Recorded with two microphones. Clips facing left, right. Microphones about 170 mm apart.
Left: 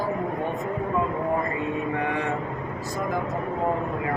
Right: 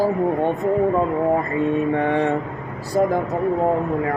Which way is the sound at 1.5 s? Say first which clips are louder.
Right 8 dB; 35° right (ahead or behind).